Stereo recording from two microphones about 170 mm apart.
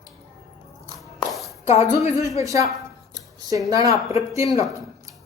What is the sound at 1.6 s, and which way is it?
Speech, 40° left (ahead or behind).